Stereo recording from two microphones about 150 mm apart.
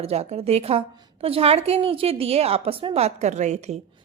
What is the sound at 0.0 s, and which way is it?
A woman's voice, 45° right (ahead or behind).